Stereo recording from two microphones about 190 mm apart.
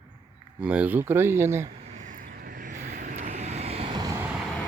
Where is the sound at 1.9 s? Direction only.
40° right (ahead or behind).